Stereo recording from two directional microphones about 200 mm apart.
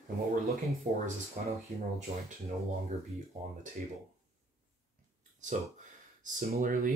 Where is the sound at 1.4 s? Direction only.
35° right (ahead or behind).